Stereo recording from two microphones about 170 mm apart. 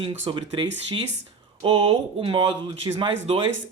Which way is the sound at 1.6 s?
35° right (ahead or behind).